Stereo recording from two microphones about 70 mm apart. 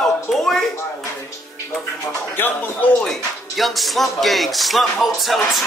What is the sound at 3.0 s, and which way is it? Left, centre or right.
Speech, centre.